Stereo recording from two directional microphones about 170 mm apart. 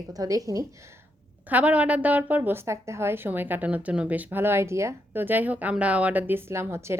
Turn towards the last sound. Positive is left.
turn(degrees=-15)  # may be behind; listen again after turning